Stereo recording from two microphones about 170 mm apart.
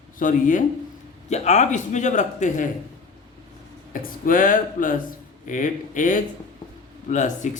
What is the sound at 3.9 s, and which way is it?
Speech, 55° left (ahead or behind).